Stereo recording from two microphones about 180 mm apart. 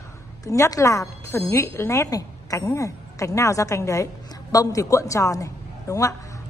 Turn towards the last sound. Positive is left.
turn(degrees=20)  # may be behind; listen again after turning